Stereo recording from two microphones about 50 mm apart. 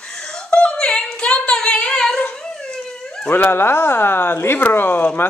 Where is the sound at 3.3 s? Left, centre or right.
Left.